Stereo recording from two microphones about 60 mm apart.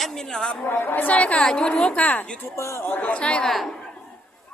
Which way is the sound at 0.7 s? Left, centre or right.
Left.